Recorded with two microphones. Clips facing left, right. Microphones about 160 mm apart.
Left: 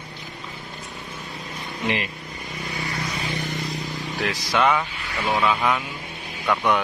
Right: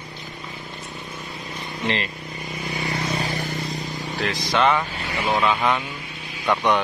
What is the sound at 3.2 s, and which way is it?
Music, 40° right (ahead or behind).